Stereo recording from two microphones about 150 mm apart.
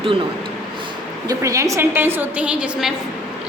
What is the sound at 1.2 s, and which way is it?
A woman's voice, 20° right (ahead or behind).